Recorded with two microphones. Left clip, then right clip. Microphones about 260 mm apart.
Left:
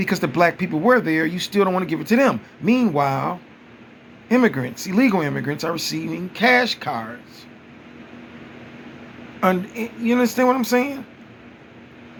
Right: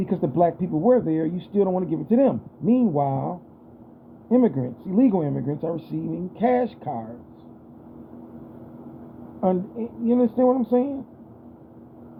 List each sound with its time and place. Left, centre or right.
0.2 s speech: left
6.4 s speech: centre
9.4 s speech: left